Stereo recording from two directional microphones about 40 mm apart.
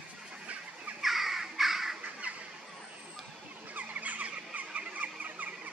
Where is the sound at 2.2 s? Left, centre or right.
Right.